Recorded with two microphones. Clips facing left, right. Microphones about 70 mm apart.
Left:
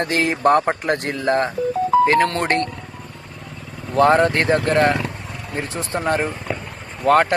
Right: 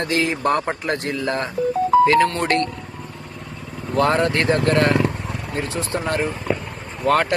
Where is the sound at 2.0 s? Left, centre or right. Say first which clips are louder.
Even; left.